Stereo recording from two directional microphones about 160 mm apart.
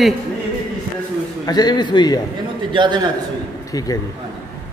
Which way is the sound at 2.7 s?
30° right (ahead or behind).